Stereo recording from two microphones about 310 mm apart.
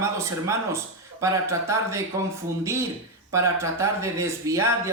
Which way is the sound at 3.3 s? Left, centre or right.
Centre.